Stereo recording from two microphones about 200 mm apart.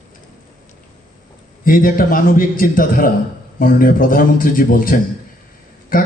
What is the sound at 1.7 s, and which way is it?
A man's voice, 45° left (ahead or behind).